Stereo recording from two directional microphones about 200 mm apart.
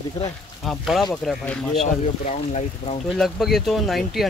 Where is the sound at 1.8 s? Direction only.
35° left (ahead or behind).